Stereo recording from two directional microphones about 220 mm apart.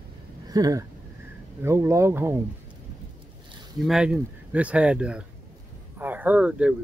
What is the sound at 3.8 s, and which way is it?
Speech, 5° right (ahead or behind).